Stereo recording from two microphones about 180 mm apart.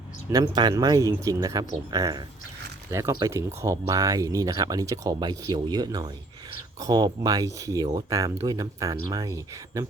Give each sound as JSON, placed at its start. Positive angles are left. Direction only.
{"t": 0.3, "sound": "speech", "side_deg": -20}